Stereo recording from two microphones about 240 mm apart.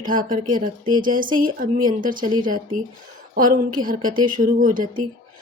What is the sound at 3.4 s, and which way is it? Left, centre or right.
Speech, right.